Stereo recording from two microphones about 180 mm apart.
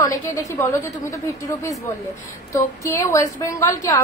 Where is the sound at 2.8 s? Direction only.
15° left (ahead or behind).